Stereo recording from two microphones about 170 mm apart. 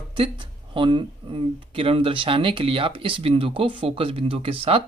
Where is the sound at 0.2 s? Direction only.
30° right (ahead or behind).